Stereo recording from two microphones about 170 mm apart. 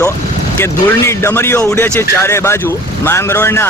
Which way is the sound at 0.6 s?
15° left (ahead or behind).